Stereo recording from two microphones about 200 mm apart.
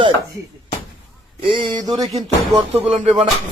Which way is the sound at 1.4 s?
25° right (ahead or behind).